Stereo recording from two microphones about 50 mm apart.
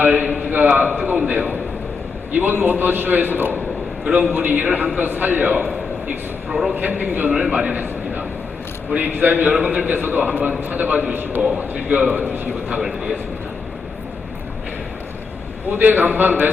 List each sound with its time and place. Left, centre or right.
0.0 s a man's voice: right
2.3 s a man's voice: right
6.5 s a man's voice: centre
6.7 s a man's voice: right
7.4 s a man's voice: right
11.5 s a man's voice: right
15.7 s a man's voice: right